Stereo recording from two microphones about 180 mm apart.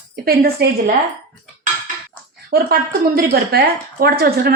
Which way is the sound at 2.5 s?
55° right (ahead or behind).